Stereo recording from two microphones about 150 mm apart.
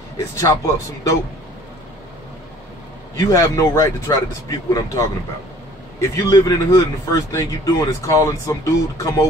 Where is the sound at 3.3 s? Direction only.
20° left (ahead or behind).